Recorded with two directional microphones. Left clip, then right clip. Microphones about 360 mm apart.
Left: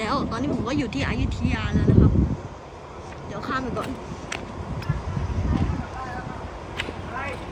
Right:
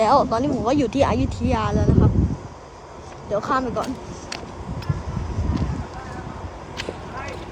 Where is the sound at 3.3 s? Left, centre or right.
Centre.